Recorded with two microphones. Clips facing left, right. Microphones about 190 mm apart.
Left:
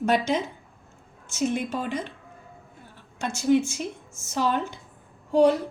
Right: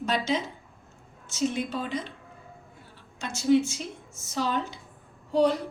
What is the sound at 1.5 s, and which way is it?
Speech, 50° left (ahead or behind).